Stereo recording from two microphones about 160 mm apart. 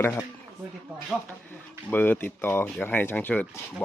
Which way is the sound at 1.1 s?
Centre (ahead or behind).